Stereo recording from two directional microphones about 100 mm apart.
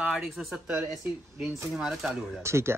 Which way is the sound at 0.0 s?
5° right (ahead or behind).